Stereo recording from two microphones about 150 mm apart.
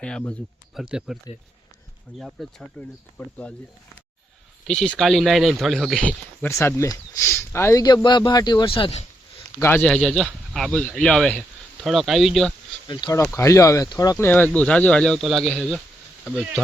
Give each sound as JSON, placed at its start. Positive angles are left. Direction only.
{"t": 0.0, "sound": "speech", "side_deg": 5}
{"t": 4.6, "sound": "speech", "side_deg": 5}
{"t": 6.5, "sound": "a man's voice", "side_deg": 20}
{"t": 9.6, "sound": "speech", "side_deg": 15}
{"t": 12.9, "sound": "a man's voice", "side_deg": 25}
{"t": 14.3, "sound": "speech", "side_deg": 10}